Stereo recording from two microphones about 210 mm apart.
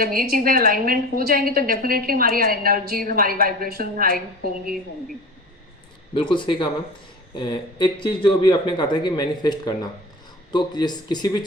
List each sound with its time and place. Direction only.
0.0 s a woman's voice: 45° right (ahead or behind)
6.1 s speech: 20° left (ahead or behind)